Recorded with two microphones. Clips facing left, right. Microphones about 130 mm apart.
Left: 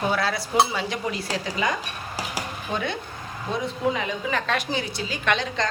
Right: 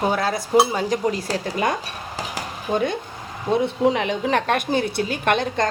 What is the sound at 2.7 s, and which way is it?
Speech, 45° right (ahead or behind).